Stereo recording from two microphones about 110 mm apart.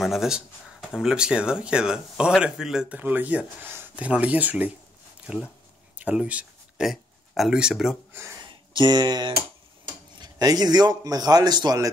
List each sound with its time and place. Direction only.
0.0 s speech: 5° right (ahead or behind)
5.9 s a sound: 15° right (ahead or behind)
6.9 s speech: 5° right (ahead or behind)
8.1 s speech: 25° right (ahead or behind)
8.4 s a sound: 45° right (ahead or behind)
10.2 s a man's voice: 35° right (ahead or behind)